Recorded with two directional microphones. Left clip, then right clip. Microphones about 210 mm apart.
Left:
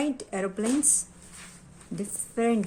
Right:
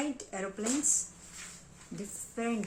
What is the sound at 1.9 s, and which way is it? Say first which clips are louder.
Speech: left 9 dB; 45° left (ahead or behind).